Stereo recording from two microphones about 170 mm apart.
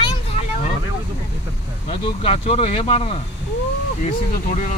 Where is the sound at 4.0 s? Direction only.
45° left (ahead or behind).